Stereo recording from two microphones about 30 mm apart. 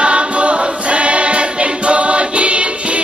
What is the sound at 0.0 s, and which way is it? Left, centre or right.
Choir, right.